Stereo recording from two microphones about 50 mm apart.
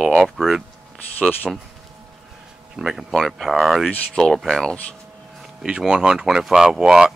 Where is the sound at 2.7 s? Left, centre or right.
Centre.